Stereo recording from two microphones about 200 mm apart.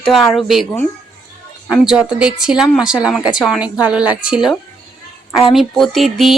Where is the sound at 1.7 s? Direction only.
5° right (ahead or behind).